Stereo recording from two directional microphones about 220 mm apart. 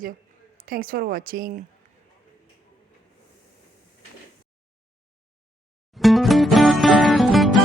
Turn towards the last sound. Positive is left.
turn(degrees=0)  # may be behind; listen again after turning